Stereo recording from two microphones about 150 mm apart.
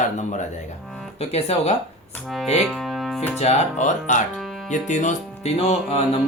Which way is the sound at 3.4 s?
45° left (ahead or behind).